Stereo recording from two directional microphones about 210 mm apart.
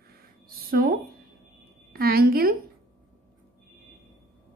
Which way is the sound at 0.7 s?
45° right (ahead or behind).